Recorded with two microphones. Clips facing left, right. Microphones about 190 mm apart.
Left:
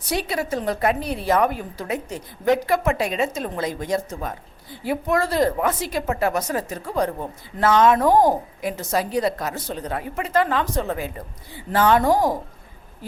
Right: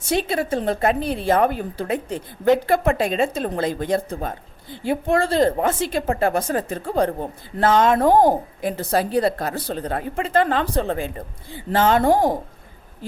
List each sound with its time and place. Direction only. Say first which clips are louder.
0.1 s a woman's voice: right 3 dB; 25° right (ahead or behind)